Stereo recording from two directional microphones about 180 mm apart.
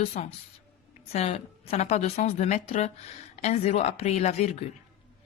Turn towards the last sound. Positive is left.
turn(degrees=35)  # may be behind; listen again after turning